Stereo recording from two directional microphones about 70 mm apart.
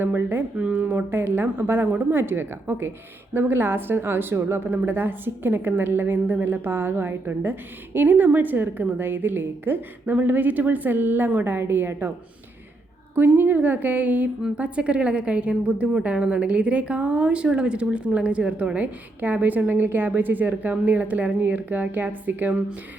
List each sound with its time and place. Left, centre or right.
0.0 s a woman's voice: right
13.1 s a woman's voice: right